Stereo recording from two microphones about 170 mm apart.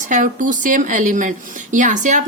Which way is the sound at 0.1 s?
50° right (ahead or behind).